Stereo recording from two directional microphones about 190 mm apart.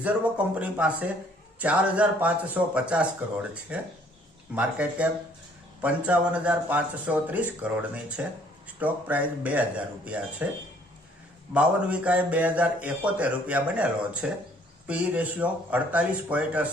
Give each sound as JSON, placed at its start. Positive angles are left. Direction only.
{"t": 0.0, "sound": "a man's voice", "side_deg": -5}
{"t": 11.5, "sound": "a man's voice", "side_deg": -5}